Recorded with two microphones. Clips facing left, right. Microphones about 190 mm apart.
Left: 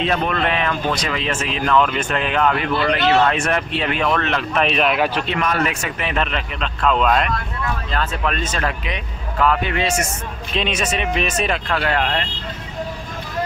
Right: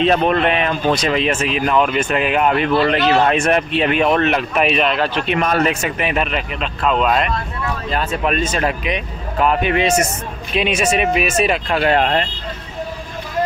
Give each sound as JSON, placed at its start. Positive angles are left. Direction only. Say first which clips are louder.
{"t": 0.5, "sound": "a man's voice", "louder": "right 4 dB", "side_deg": -20}
{"t": 2.5, "sound": "speech", "louder": "right 4 dB", "side_deg": -25}
{"t": 4.6, "sound": "a man's voice", "louder": "right 1 dB", "side_deg": 0}
{"t": 4.9, "sound": "a man's voice", "louder": "even", "side_deg": 10}
{"t": 5.4, "sound": "speech", "louder": "right 4 dB", "side_deg": -35}
{"t": 5.8, "sound": "a man's voice", "louder": "right 3 dB", "side_deg": -15}